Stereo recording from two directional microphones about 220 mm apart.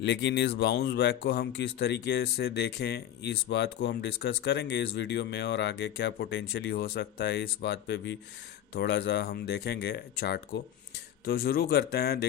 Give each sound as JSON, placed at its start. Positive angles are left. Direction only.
{"t": 0.0, "sound": "speech", "side_deg": 50}